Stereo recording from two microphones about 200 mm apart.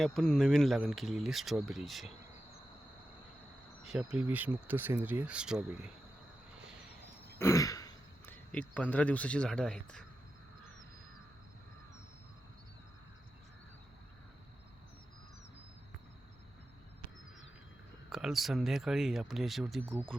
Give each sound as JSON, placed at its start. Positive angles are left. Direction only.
{"t": 0.0, "sound": "speech", "side_deg": 5}
{"t": 3.9, "sound": "speech", "side_deg": -5}
{"t": 7.3, "sound": "throat clearing", "side_deg": 15}
{"t": 8.5, "sound": "speech", "side_deg": 5}
{"t": 18.1, "sound": "speech", "side_deg": 0}
{"t": 19.8, "sound": "speech", "side_deg": -10}